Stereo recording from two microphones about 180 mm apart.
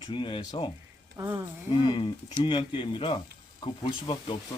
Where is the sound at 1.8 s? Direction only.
25° left (ahead or behind).